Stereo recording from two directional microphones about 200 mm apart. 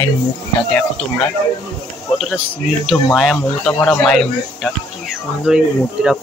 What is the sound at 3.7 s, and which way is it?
Speech, 10° left (ahead or behind).